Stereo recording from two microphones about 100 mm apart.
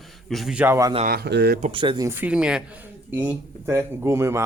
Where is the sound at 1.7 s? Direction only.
55° right (ahead or behind).